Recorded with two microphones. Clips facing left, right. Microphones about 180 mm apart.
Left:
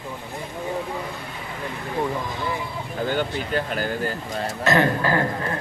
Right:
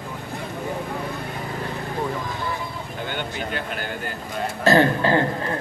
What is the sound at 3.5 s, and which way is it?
Speech, 40° left (ahead or behind).